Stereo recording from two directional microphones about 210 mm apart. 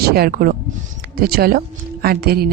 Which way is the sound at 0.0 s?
45° right (ahead or behind).